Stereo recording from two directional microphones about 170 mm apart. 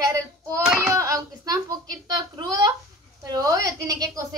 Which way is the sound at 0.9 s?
20° right (ahead or behind).